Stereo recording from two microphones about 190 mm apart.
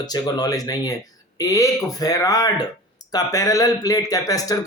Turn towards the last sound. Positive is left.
turn(degrees=20)  # may be behind; listen again after turning